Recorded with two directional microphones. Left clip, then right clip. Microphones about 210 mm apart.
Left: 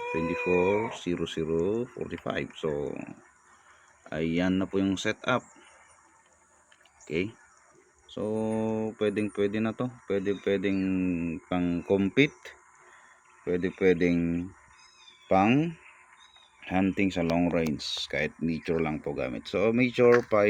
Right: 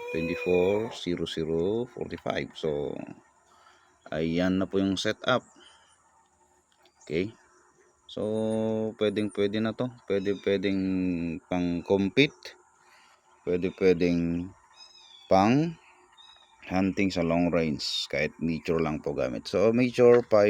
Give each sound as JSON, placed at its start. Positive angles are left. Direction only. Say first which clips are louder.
{"t": 0.1, "sound": "speech", "louder": "right 1 dB", "side_deg": -10}
{"t": 4.1, "sound": "speech", "louder": "right 1 dB", "side_deg": -15}
{"t": 7.0, "sound": "speech", "louder": "right 1 dB", "side_deg": -15}